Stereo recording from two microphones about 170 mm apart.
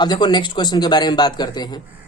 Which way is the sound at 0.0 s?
25° left (ahead or behind).